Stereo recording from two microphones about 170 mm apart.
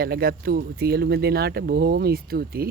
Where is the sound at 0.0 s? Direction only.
60° right (ahead or behind).